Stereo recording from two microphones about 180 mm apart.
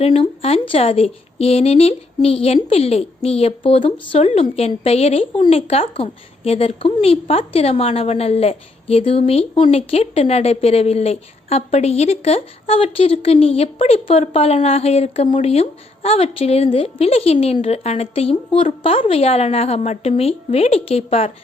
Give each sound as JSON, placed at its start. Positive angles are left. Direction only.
{"t": 0.0, "sound": "speech", "side_deg": 35}